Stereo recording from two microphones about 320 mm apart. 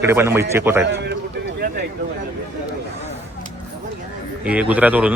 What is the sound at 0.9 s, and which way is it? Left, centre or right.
Speech, right.